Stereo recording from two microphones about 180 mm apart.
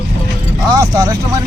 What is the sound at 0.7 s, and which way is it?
Speech, 20° right (ahead or behind).